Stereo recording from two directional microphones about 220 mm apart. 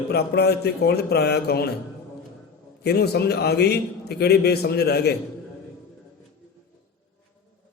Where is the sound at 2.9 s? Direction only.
45° left (ahead or behind).